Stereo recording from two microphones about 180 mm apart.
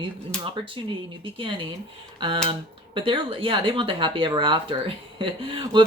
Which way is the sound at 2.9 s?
30° right (ahead or behind).